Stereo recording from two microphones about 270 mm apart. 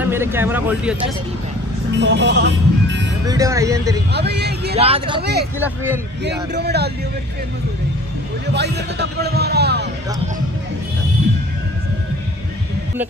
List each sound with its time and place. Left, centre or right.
0.0 s speech: centre
2.0 s speech: right
3.3 s speech: centre
4.1 s speech: right
4.7 s speech: right
5.2 s speech: right
6.5 s speech: right
8.5 s speech: right